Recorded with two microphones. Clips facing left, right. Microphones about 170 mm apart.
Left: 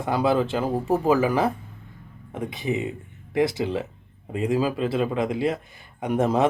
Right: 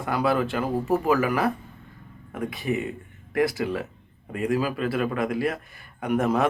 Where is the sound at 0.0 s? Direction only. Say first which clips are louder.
Left 2 dB; 25° left (ahead or behind).